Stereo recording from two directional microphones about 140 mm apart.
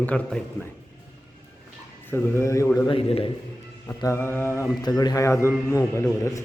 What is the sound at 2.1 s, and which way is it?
Speech, 20° left (ahead or behind).